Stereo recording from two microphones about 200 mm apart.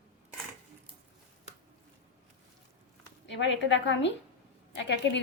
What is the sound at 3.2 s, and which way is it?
A woman's voice, 65° left (ahead or behind).